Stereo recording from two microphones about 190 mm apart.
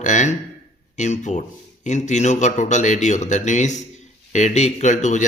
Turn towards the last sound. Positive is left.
turn(degrees=40)  # may be behind; listen again after turning